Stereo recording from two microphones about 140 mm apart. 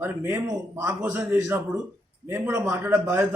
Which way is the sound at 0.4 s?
20° right (ahead or behind).